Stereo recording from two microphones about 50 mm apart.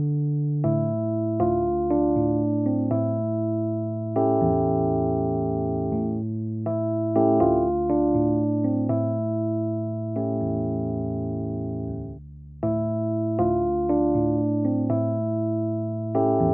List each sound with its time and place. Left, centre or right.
0.7 s electric piano: right
4.1 s music: centre
6.9 s electric piano: right
12.6 s electric piano: centre
16.2 s music: centre